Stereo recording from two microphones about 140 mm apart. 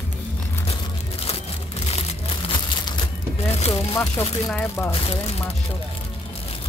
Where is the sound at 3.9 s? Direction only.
15° left (ahead or behind).